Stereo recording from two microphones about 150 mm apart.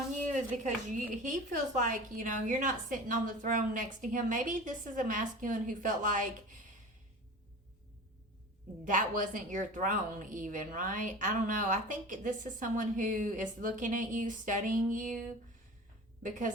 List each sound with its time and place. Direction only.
0.3 s a woman's voice: 55° right (ahead or behind)
8.8 s a woman's voice: 60° right (ahead or behind)
16.2 s a woman's voice: 60° right (ahead or behind)